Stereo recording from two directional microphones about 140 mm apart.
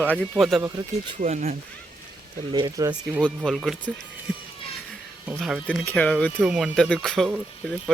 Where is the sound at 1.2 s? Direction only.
55° right (ahead or behind).